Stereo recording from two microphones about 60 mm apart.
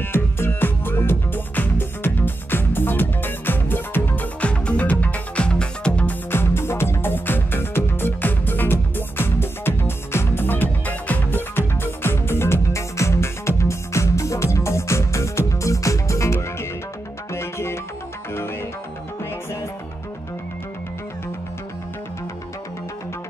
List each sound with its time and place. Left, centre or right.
0.0 s music: left; by 6.1 s centre
6.3 s music: left